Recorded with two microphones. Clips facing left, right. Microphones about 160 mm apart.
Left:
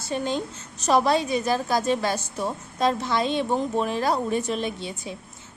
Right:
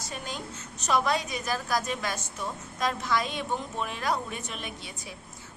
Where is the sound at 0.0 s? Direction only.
30° left (ahead or behind).